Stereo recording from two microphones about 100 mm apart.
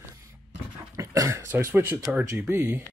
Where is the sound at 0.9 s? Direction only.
35° right (ahead or behind).